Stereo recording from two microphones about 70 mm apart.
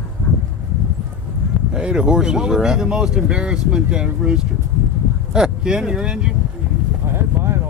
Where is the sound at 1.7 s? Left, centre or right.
Centre.